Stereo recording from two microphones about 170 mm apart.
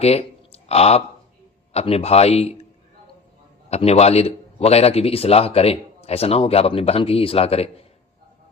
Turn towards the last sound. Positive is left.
turn(degrees=35)  # may be behind; listen again after turning